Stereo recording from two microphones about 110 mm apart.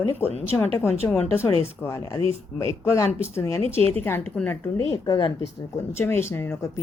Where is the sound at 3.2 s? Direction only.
25° left (ahead or behind).